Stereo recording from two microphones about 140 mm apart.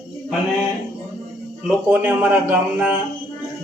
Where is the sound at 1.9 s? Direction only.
10° right (ahead or behind).